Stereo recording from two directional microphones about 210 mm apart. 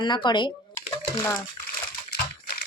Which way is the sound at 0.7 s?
10° left (ahead or behind).